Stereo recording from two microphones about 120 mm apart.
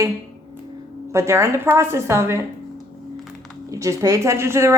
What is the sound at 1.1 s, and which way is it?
A woman's voice, 25° right (ahead or behind).